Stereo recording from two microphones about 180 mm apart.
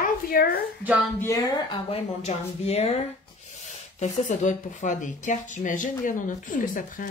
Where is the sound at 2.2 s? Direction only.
35° left (ahead or behind).